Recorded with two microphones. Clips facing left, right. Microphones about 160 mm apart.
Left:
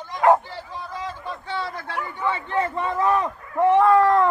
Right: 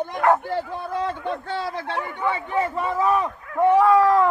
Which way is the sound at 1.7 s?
25° right (ahead or behind).